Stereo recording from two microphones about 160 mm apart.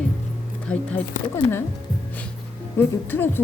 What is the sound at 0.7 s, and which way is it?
Speech, 5° left (ahead or behind).